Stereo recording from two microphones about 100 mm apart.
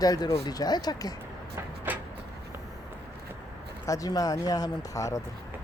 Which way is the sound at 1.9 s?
20° right (ahead or behind).